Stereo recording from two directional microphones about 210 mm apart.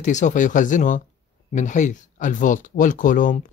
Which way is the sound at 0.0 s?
35° left (ahead or behind).